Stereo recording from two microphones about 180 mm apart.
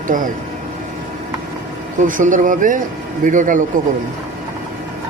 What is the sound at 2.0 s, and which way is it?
Speech, 45° right (ahead or behind).